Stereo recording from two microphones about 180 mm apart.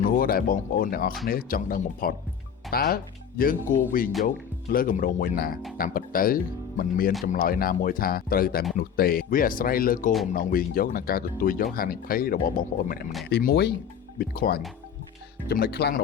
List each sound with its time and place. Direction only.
0.2 s speech: 55° left (ahead or behind)